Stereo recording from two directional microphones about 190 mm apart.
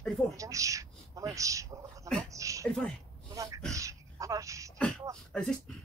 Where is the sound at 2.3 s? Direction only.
15° right (ahead or behind).